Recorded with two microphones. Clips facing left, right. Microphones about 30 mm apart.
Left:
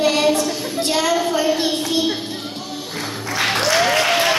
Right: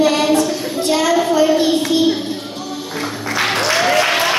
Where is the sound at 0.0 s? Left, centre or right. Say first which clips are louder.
Right 3 dB; right.